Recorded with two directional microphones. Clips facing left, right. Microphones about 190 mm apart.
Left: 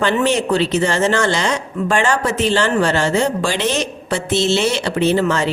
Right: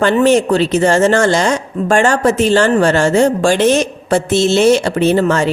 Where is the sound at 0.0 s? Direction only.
45° right (ahead or behind).